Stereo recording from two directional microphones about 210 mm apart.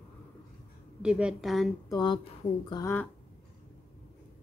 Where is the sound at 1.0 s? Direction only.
5° right (ahead or behind).